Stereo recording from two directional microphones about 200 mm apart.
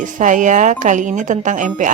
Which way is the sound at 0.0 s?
40° right (ahead or behind).